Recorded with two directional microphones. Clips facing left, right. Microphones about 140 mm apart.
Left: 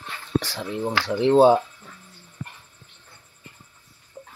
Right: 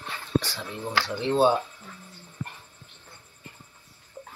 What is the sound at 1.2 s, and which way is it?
Speech, 90° left.